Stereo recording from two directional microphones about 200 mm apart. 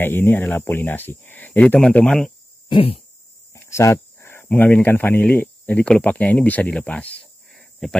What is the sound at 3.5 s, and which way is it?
Speech, 15° left (ahead or behind).